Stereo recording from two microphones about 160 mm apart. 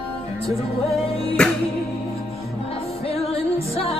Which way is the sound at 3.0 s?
40° left (ahead or behind).